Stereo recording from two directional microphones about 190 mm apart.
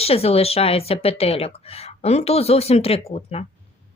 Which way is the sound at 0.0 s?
30° left (ahead or behind).